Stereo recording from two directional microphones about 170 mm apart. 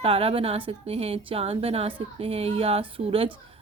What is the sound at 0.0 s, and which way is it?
Speech, 35° right (ahead or behind).